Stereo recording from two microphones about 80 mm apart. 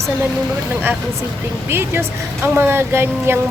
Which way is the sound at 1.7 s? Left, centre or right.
Right.